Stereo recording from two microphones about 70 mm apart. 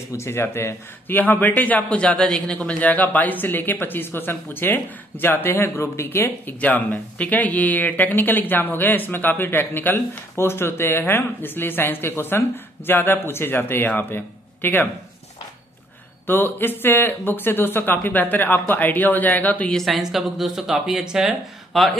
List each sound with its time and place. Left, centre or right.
0.2 s a man's voice: left
7.2 s a man's voice: left
16.3 s a man's voice: left
19.7 s speech: centre